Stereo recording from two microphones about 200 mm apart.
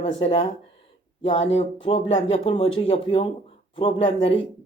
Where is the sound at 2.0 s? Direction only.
70° left (ahead or behind).